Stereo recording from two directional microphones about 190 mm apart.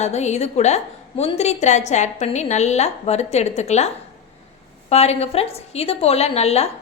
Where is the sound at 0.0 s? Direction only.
35° left (ahead or behind).